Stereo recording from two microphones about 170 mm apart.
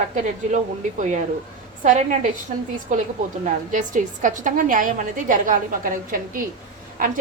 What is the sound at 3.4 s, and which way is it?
A woman's voice, 50° right (ahead or behind).